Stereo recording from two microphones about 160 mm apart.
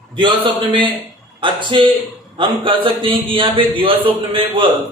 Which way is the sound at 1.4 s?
30° right (ahead or behind).